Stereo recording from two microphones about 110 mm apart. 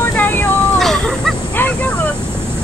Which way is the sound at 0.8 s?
5° left (ahead or behind).